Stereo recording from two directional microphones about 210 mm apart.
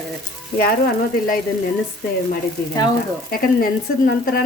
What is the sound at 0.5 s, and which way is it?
Frying, 45° left (ahead or behind).